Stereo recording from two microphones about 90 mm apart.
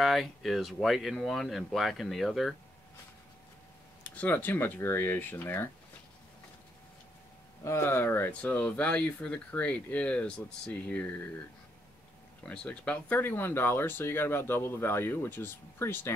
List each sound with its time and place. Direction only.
0.0 s speech: centre (ahead or behind)
4.0 s speech: 15° left (ahead or behind)
7.6 s speech: 30° left (ahead or behind)
8.3 s speech: 15° left (ahead or behind)
12.4 s speech: 15° left (ahead or behind)